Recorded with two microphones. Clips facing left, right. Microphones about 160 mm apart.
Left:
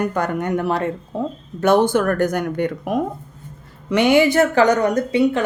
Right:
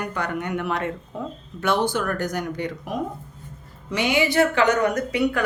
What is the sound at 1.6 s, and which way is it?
A woman's voice, 50° left (ahead or behind).